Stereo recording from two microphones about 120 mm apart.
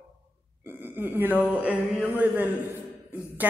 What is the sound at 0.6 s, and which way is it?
A woman's voice, 15° right (ahead or behind).